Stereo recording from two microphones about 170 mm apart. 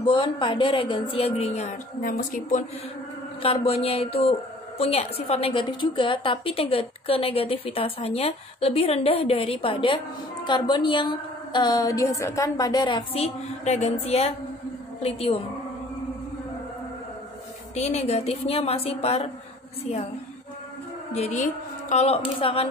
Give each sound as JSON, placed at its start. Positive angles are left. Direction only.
{"t": 0.0, "sound": "a woman's voice", "side_deg": 30}
{"t": 3.4, "sound": "a woman's voice", "side_deg": 35}
{"t": 17.7, "sound": "a woman's voice", "side_deg": 40}
{"t": 21.1, "sound": "a woman's voice", "side_deg": 40}